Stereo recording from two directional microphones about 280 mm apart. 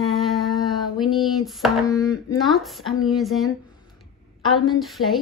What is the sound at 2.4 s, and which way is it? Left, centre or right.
Speech, centre.